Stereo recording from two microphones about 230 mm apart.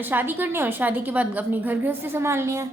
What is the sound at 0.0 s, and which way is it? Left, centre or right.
A woman's voice, centre.